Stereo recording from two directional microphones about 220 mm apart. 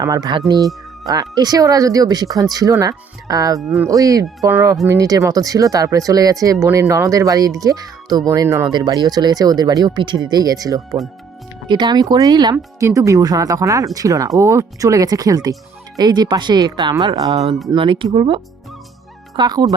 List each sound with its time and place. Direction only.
0.0 s speech: 15° right (ahead or behind)
19.4 s speech: 20° right (ahead or behind)